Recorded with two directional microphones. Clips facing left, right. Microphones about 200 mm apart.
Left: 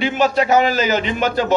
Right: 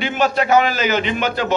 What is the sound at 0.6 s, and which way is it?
Speech, 40° left (ahead or behind).